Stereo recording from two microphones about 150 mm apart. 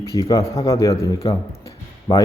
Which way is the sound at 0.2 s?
20° left (ahead or behind).